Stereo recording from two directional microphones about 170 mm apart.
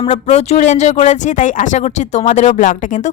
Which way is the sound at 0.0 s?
40° left (ahead or behind).